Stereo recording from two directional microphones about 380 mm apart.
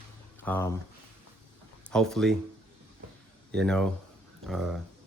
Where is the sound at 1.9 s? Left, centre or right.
Centre.